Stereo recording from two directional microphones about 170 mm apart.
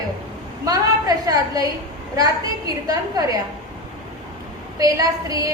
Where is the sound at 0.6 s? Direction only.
20° right (ahead or behind).